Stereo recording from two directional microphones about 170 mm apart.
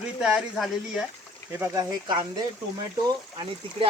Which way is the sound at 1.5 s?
15° right (ahead or behind).